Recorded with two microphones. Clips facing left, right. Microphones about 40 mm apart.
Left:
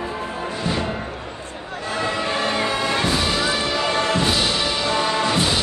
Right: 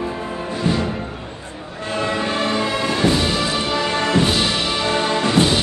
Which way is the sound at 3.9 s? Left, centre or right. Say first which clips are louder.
Right 3 dB; right.